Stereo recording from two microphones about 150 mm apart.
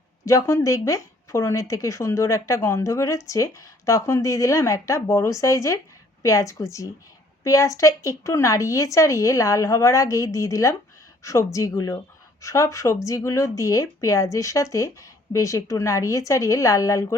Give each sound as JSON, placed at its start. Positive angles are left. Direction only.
{"t": 0.3, "sound": "speech", "side_deg": 20}